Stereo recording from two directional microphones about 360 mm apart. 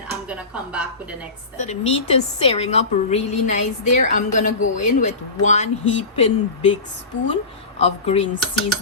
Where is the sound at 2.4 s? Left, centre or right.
Centre.